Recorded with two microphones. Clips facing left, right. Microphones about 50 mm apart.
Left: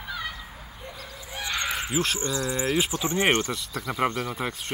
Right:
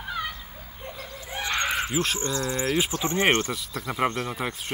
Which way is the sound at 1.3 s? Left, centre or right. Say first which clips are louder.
Right 3 dB; right.